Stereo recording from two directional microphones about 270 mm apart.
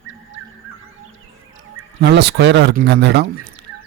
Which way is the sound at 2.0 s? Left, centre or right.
Right.